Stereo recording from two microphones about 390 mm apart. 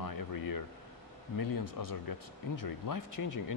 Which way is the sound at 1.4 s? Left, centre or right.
Left.